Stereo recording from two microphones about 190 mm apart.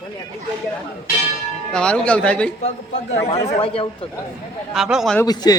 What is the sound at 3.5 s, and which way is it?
Speech, 30° left (ahead or behind).